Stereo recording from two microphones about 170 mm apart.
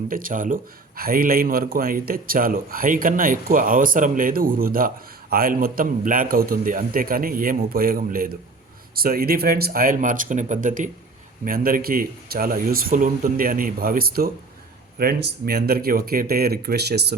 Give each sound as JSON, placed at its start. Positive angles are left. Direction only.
{"t": 0.1, "sound": "speech", "side_deg": -55}